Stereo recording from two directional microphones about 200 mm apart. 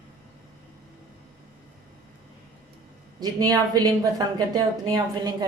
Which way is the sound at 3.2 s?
20° right (ahead or behind).